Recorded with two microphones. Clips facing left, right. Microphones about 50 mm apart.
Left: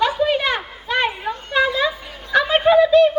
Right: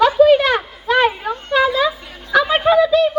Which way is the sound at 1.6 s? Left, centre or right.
Centre.